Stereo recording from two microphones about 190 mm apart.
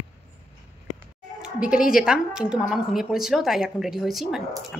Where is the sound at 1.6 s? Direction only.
5° right (ahead or behind).